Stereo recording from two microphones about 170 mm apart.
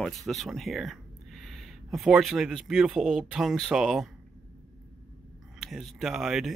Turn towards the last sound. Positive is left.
turn(degrees=0)  # may be behind; listen again after turning